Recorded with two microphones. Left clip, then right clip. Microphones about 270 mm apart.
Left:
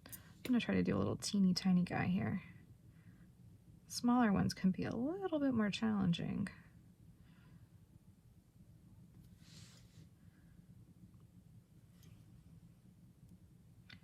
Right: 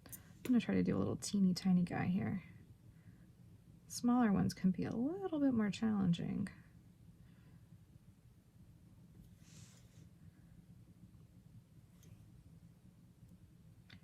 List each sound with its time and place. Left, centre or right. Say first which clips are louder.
0.5 s speech: even; centre
3.9 s speech: left 1 dB; centre